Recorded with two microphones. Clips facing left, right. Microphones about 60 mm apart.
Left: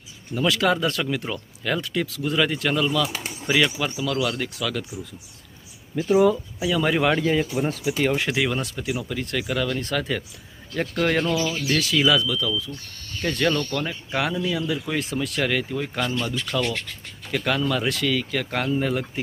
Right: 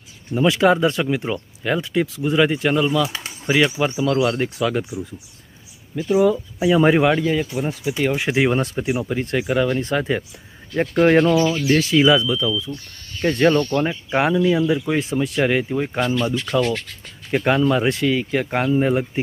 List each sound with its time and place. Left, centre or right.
0.3 s speech: right
3.7 s speech: right
5.9 s speech: centre
6.6 s speech: right
7.1 s speech: centre
8.3 s speech: right